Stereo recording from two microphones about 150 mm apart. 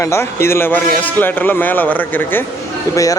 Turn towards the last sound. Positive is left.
turn(degrees=25)  # may be behind; listen again after turning